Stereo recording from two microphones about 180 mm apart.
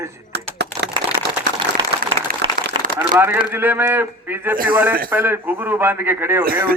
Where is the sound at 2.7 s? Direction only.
25° right (ahead or behind).